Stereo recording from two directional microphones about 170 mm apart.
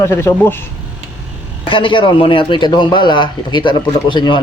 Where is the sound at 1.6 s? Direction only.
30° left (ahead or behind).